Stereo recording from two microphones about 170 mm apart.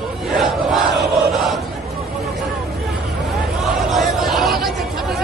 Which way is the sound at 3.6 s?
Centre (ahead or behind).